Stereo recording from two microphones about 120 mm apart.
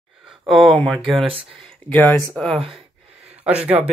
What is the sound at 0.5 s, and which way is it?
Speech, centre (ahead or behind).